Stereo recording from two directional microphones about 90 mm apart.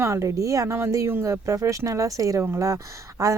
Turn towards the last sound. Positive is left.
turn(degrees=-35)  # may be behind; listen again after turning